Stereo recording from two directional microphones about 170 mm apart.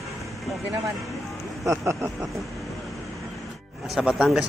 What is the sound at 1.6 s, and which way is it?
Speech, 15° right (ahead or behind).